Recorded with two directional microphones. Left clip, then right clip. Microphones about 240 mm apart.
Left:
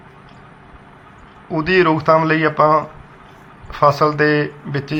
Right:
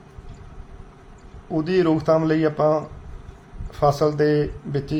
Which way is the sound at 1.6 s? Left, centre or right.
Centre.